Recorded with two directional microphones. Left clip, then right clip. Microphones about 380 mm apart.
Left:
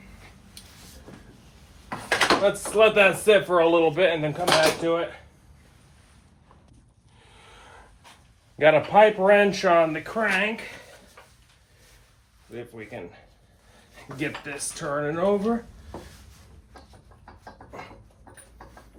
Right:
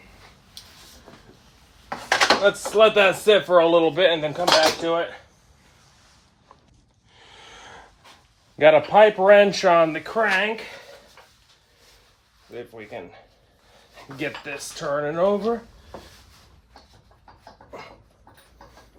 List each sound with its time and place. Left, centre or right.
2.4 s speech: right
7.2 s a sound: right
8.5 s speech: right
12.5 s speech: centre